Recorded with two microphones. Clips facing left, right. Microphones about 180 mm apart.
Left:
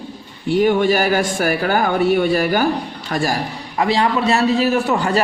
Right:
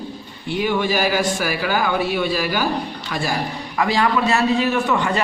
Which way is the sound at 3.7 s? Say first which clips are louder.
Left 2 dB; 30° left (ahead or behind).